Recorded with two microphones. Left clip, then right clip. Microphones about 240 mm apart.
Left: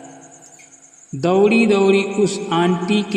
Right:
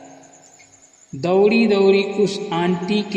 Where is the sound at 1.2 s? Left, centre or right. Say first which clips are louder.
Left 1 dB; left.